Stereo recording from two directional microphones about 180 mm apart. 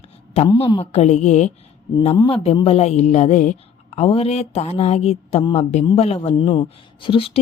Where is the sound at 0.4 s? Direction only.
25° left (ahead or behind).